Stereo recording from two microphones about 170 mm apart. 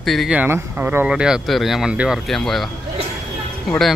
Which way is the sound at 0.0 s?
Centre (ahead or behind).